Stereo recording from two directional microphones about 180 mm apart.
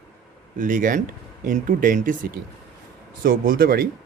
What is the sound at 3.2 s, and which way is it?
Speech, 55° right (ahead or behind).